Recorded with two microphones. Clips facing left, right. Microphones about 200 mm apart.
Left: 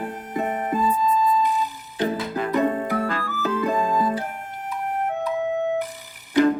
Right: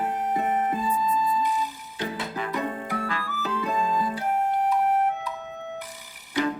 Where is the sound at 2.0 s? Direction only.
45° left (ahead or behind).